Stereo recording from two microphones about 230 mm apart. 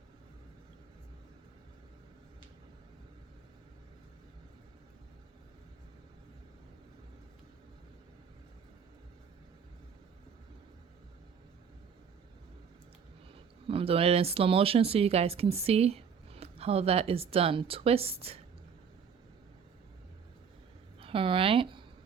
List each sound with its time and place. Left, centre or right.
13.7 s speech: right
21.0 s speech: right